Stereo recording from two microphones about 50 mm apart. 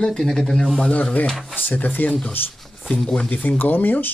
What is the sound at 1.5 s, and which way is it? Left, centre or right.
Speech, left.